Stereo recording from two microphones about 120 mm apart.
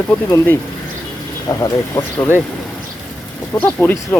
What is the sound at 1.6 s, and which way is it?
Speech, 25° left (ahead or behind).